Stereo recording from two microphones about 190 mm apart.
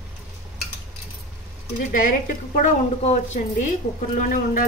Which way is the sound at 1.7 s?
45° left (ahead or behind).